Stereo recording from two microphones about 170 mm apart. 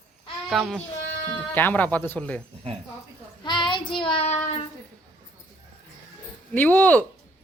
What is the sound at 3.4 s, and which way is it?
Child singing, 30° left (ahead or behind).